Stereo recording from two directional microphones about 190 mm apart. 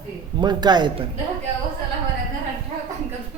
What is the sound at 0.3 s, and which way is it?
Speech, 20° right (ahead or behind).